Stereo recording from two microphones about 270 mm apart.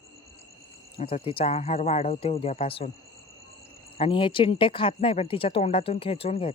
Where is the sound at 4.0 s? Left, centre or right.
Centre.